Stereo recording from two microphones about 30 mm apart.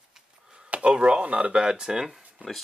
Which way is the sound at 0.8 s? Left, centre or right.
Right.